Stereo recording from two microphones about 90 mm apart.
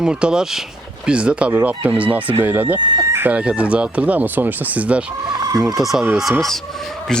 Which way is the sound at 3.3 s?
15° right (ahead or behind).